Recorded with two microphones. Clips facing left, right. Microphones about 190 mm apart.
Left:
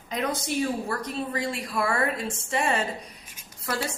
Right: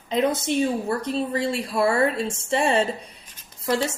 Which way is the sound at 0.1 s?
25° right (ahead or behind).